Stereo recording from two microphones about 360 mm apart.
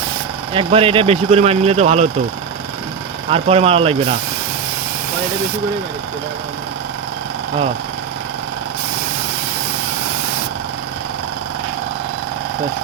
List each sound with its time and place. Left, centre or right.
0.5 s speech: centre
3.2 s speech: centre